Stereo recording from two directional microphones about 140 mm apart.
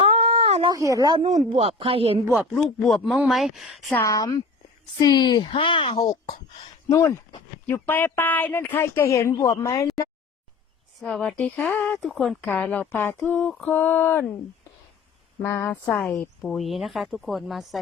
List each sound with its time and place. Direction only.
0.1 s a sound: 45° right (ahead or behind)
0.7 s speech: 25° right (ahead or behind)
1.5 s speech: 45° right (ahead or behind)
2.3 s a woman's voice: 5° right (ahead or behind)
3.9 s a woman's voice: 20° left (ahead or behind)
6.8 s a woman's voice: 20° left (ahead or behind)
11.0 s a woman's voice: 5° left (ahead or behind)
12.4 s a woman's voice: 10° left (ahead or behind)
15.4 s a woman's voice: 20° left (ahead or behind); by 17.7 s centre (ahead or behind)